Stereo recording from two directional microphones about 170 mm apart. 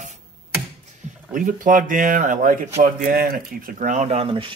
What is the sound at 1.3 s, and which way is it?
A man's voice, 50° right (ahead or behind).